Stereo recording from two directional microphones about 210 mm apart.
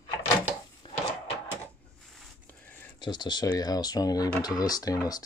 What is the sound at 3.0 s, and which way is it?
Speech, 20° left (ahead or behind).